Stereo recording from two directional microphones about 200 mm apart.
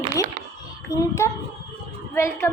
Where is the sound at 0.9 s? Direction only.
15° left (ahead or behind).